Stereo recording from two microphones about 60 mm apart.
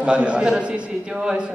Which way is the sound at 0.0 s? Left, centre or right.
Centre.